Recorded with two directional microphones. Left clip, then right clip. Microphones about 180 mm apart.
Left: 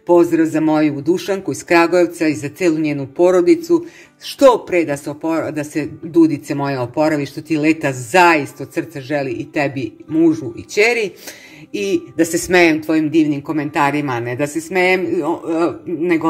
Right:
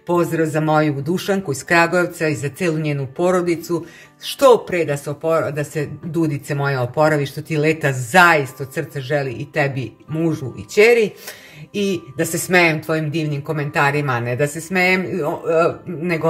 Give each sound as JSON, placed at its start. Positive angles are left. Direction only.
{"t": 0.1, "sound": "speech", "side_deg": 30}
{"t": 11.8, "sound": "speech", "side_deg": 40}